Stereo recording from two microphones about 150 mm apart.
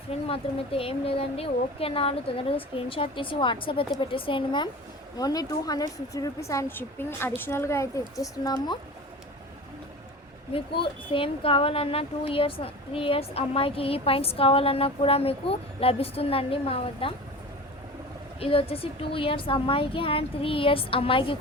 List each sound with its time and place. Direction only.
0.1 s a woman's voice: 40° left (ahead or behind)
10.5 s speech: 35° left (ahead or behind)
18.3 s speech: 40° left (ahead or behind)